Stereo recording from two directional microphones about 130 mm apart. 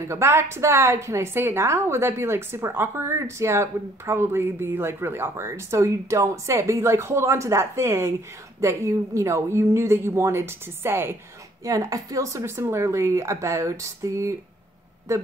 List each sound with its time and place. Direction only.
0.0 s a woman's voice: 20° right (ahead or behind)